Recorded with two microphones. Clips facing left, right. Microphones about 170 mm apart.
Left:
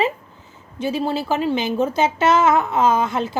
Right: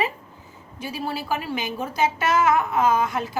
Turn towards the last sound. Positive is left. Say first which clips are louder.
# left 3 dB
turn(degrees=25)  # may be behind; listen again after turning